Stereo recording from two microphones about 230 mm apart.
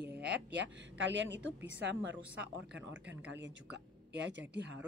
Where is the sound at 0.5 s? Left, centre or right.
Right.